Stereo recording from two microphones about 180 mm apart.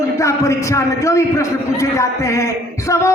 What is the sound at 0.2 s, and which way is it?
A man's voice, 15° left (ahead or behind).